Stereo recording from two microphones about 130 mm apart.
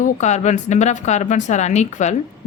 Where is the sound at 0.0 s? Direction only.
65° left (ahead or behind).